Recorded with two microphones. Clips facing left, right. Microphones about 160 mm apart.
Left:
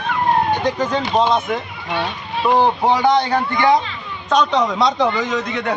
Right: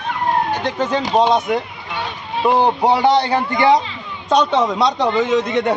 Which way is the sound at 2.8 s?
30° right (ahead or behind).